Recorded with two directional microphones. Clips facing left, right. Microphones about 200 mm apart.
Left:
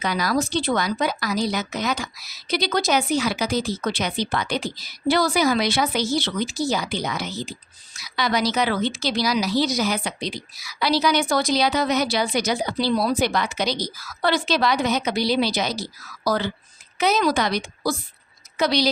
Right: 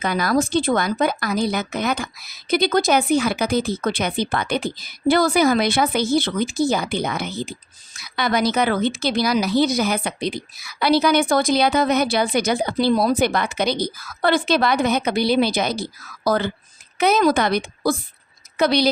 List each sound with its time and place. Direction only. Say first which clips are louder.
0.0 s a woman's voice: right 3 dB; 50° right (ahead or behind)